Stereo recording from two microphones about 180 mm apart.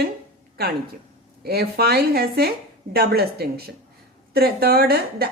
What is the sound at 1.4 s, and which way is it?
Speech, 60° right (ahead or behind).